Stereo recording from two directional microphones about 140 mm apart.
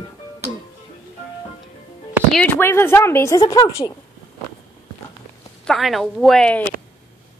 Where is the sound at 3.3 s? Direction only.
35° left (ahead or behind).